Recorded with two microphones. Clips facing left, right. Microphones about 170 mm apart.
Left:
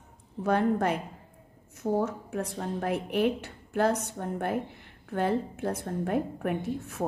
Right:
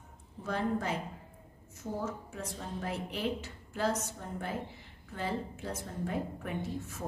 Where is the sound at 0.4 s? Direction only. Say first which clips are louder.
Left 8 dB; 60° left (ahead or behind).